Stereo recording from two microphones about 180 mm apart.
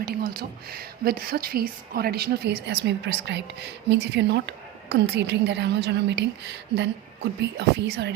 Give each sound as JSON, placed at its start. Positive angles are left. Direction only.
{"t": 0.0, "sound": "a woman's voice", "side_deg": -60}